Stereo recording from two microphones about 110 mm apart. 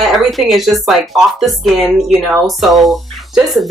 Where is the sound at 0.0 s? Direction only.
Centre (ahead or behind).